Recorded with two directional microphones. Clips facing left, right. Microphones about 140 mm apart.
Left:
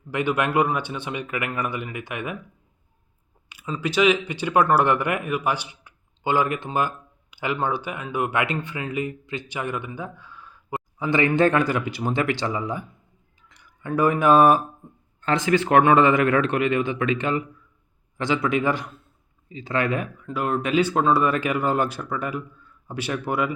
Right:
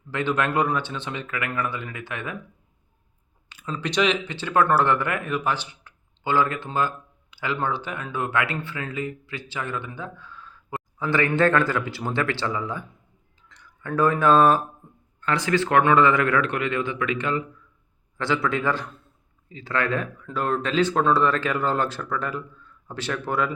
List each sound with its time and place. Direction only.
0.1 s speech: 15° left (ahead or behind)
3.5 s speech: 10° left (ahead or behind)